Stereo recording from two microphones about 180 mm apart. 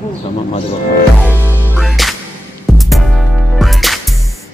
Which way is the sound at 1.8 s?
Centre (ahead or behind).